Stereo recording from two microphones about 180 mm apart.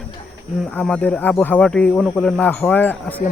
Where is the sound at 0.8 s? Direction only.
5° left (ahead or behind).